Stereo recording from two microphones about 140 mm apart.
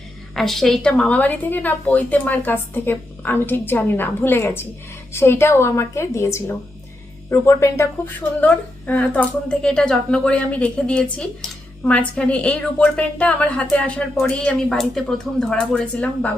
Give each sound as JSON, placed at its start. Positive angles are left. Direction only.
{"t": 0.3, "sound": "speech", "side_deg": 0}